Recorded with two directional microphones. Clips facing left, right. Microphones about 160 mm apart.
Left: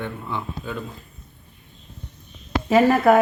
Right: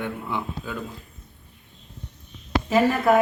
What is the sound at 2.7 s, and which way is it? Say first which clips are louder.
Speech: left 4 dB; 60° left (ahead or behind).